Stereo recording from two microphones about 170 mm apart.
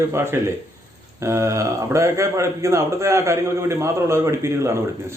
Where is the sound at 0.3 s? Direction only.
15° right (ahead or behind).